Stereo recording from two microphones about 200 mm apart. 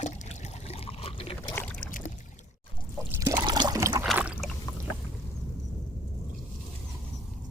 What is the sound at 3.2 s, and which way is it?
Pour, 15° right (ahead or behind).